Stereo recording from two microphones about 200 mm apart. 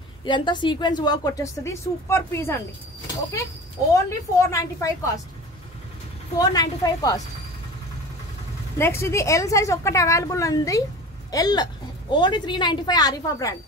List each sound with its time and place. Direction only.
0.2 s a woman's voice: 25° left (ahead or behind)
3.9 s a woman's voice: 15° left (ahead or behind)
6.5 s a woman's voice: 20° left (ahead or behind)
8.7 s a woman's voice: 10° left (ahead or behind)